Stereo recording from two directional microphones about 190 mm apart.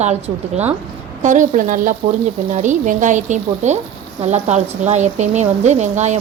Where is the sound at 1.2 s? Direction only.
40° right (ahead or behind).